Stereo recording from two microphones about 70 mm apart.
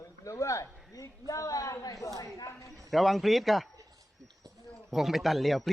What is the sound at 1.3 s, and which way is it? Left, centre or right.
A man's voice, left.